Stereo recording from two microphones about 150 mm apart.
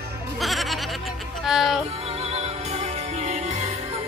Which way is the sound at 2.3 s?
45° right (ahead or behind).